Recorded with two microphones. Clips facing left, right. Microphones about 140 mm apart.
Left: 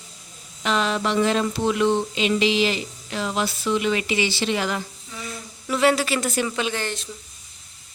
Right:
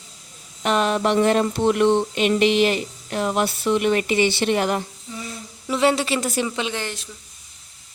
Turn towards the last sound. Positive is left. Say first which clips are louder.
# even
turn(degrees=-20)  # may be behind; listen again after turning